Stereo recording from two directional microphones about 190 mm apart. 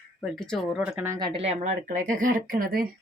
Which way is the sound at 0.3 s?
Centre (ahead or behind).